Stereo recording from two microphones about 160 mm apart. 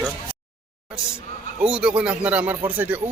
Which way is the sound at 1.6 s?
5° right (ahead or behind).